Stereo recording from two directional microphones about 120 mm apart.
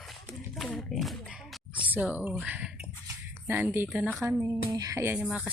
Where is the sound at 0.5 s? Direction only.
Centre (ahead or behind).